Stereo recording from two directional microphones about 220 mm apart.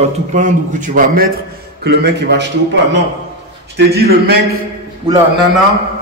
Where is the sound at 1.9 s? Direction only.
50° right (ahead or behind).